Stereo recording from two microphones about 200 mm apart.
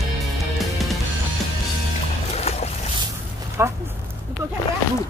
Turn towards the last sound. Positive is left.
turn(degrees=-10)  # may be behind; listen again after turning